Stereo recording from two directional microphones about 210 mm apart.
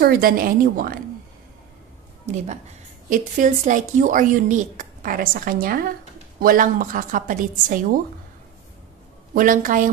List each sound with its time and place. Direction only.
0.0 s a woman's voice: 45° right (ahead or behind)
2.2 s a woman's voice: 35° right (ahead or behind)
9.3 s a woman's voice: 40° right (ahead or behind)